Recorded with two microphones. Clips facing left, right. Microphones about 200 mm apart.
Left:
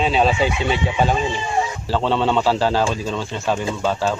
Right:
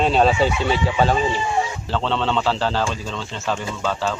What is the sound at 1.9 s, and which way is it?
A man's voice, 10° left (ahead or behind).